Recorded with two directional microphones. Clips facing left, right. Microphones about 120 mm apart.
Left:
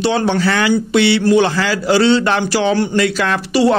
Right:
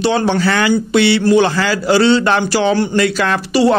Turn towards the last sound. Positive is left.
turn(degrees=-40)  # may be behind; listen again after turning